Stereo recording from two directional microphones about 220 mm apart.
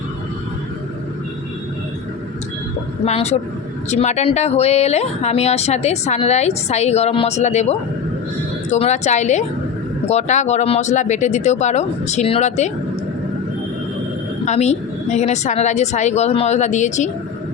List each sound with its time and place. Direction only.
3.0 s speech: 30° left (ahead or behind)
14.4 s speech: 30° left (ahead or behind)